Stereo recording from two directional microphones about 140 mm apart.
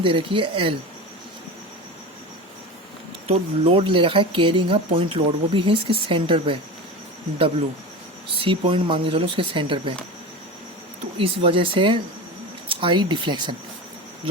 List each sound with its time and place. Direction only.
0.0 s speech: 40° right (ahead or behind)
3.2 s speech: 45° right (ahead or behind)
8.4 s speech: 40° right (ahead or behind)
11.2 s speech: 40° right (ahead or behind)